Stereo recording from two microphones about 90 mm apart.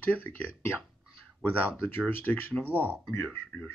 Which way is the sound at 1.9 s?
20° left (ahead or behind).